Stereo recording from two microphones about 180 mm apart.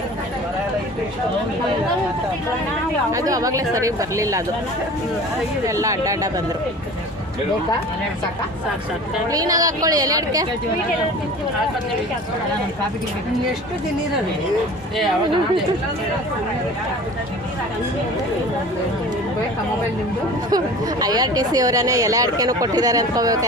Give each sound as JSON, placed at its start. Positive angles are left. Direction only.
{"t": 3.1, "sound": "speech", "side_deg": -20}
{"t": 5.6, "sound": "speech", "side_deg": -15}
{"t": 9.3, "sound": "speech", "side_deg": -20}
{"t": 20.5, "sound": "speech", "side_deg": -20}